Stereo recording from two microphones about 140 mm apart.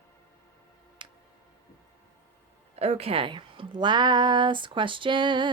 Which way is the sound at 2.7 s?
50° right (ahead or behind).